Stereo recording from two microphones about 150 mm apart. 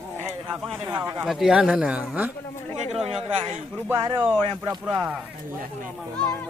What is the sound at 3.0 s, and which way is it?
Speech, 35° right (ahead or behind).